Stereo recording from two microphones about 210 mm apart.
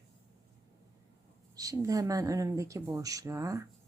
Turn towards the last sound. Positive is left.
turn(degrees=-15)  # may be behind; listen again after turning